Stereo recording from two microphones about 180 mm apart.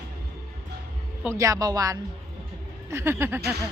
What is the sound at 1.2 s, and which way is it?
Speech, 15° right (ahead or behind).